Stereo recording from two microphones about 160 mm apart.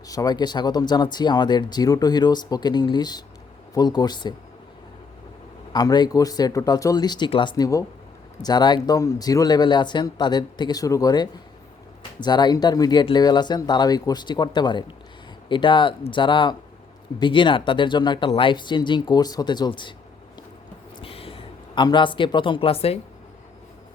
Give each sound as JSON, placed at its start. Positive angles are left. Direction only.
{"t": 0.1, "sound": "speech", "side_deg": 25}
{"t": 5.7, "sound": "speech", "side_deg": 25}
{"t": 21.0, "sound": "speech", "side_deg": 35}